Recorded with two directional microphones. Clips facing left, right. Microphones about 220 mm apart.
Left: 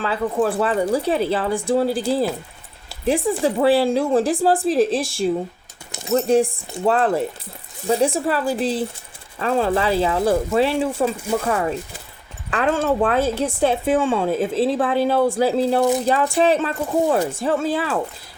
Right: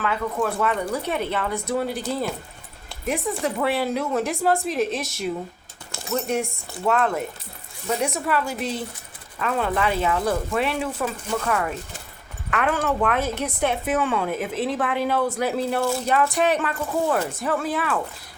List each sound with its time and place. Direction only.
0.0 s a woman's voice: 30° left (ahead or behind)
15.8 s speech: 20° left (ahead or behind)
16.3 s speech: 30° left (ahead or behind)